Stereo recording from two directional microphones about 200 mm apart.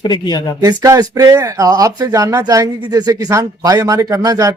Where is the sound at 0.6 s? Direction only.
15° right (ahead or behind).